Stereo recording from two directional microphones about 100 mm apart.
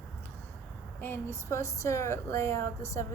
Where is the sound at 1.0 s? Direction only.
25° left (ahead or behind).